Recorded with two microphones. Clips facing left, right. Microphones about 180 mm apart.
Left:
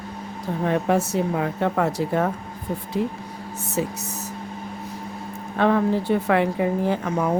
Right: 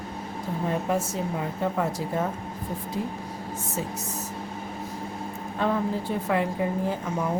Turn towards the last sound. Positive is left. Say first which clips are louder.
# left 5 dB
turn(degrees=70)  # may be behind; listen again after turning